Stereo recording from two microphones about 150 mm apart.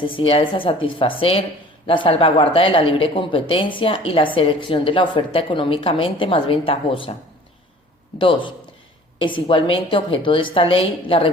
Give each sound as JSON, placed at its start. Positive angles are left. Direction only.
{"t": 0.2, "sound": "speech", "side_deg": 35}
{"t": 8.2, "sound": "speech", "side_deg": 35}